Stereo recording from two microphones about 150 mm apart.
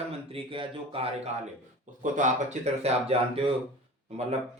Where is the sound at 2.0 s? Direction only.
55° right (ahead or behind).